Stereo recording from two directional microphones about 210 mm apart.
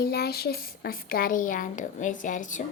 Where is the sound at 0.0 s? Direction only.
50° left (ahead or behind).